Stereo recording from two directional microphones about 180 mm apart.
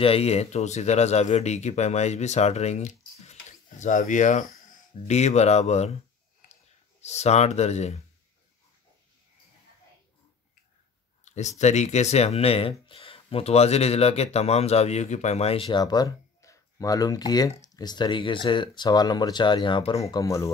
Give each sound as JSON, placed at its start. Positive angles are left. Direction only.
{"t": 0.0, "sound": "speech", "side_deg": 35}
{"t": 11.2, "sound": "speech", "side_deg": 40}